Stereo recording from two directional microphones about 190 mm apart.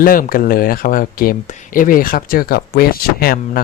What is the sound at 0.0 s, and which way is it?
Speech, 50° left (ahead or behind).